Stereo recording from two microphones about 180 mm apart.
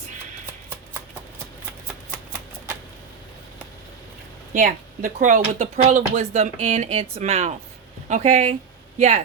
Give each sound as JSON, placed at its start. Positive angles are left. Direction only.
{"t": 4.5, "sound": "speech", "side_deg": -45}